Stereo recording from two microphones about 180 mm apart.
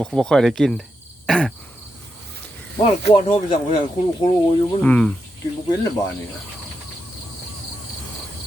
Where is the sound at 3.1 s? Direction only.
30° left (ahead or behind).